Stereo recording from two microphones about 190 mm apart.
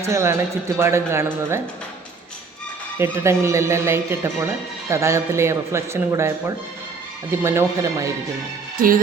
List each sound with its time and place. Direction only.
0.0 s speech: 15° right (ahead or behind)
3.0 s speech: 15° right (ahead or behind)
8.8 s music: 45° right (ahead or behind)